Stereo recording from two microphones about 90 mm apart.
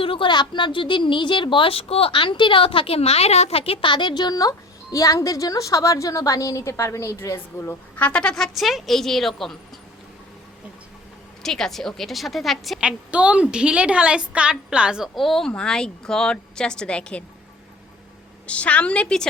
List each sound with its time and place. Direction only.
0.0 s a woman's voice: 90° left
0.3 s a woman's voice: 60° left (ahead or behind); by 7.3 s 35° left (ahead or behind)
7.6 s speech: 20° left (ahead or behind)
8.5 s a woman's voice: centre (ahead or behind)
11.4 s a woman's voice: 5° left (ahead or behind)
12.8 s a woman's voice: 10° right (ahead or behind)
15.1 s speech: centre (ahead or behind)
18.4 s speech: 15° left (ahead or behind)